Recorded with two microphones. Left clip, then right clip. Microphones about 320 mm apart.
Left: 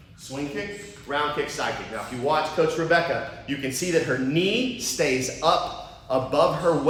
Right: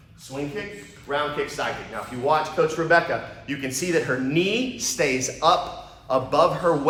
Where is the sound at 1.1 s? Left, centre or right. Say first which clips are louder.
Even; centre.